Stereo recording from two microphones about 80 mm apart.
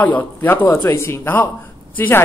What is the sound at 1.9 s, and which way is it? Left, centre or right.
Speech, left.